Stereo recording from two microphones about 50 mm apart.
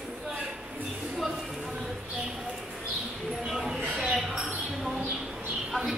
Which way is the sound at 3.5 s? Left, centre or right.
Centre.